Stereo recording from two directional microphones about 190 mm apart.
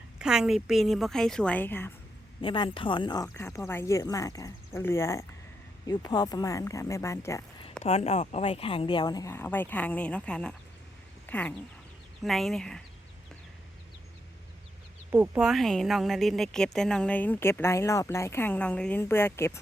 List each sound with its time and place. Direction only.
0.2 s a woman's voice: 5° right (ahead or behind)
2.4 s a woman's voice: 25° left (ahead or behind)
7.9 s a woman's voice: 30° left (ahead or behind); by 12.8 s 5° left (ahead or behind)
15.1 s a woman's voice: 5° right (ahead or behind); by 19.5 s 10° left (ahead or behind)